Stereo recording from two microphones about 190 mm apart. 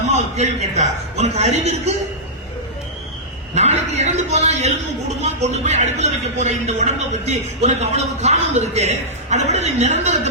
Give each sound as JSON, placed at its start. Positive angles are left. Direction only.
{"t": 0.1, "sound": "speech", "side_deg": -35}
{"t": 3.5, "sound": "speech", "side_deg": -35}